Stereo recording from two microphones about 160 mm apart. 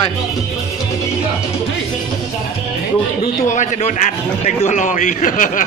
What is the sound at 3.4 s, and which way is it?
A man's voice, 50° left (ahead or behind).